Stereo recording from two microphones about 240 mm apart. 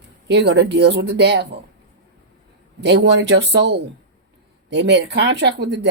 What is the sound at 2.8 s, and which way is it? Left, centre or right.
Speech, right.